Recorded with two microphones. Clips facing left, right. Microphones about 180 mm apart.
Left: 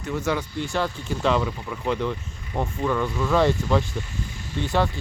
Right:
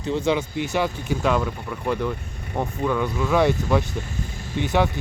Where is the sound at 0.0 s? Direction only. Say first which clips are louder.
Right 4 dB; 30° right (ahead or behind).